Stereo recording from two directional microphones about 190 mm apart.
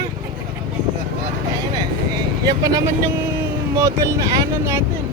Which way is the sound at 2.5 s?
20° right (ahead or behind).